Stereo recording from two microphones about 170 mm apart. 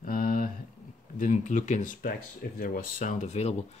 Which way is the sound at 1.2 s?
50° left (ahead or behind).